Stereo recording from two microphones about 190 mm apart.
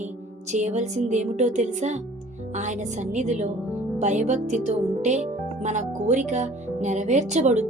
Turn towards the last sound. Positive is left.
turn(degrees=-40)  # may be behind; listen again after turning